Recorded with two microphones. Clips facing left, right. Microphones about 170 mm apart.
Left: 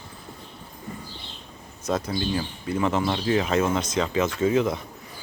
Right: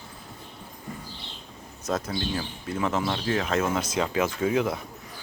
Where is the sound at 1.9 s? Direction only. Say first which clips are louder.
Left 3 dB; centre (ahead or behind).